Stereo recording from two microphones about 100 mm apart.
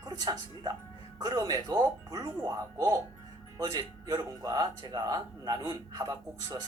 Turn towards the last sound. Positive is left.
turn(degrees=-40)  # may be behind; listen again after turning